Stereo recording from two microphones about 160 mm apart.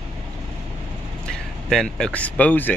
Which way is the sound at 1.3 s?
5° left (ahead or behind).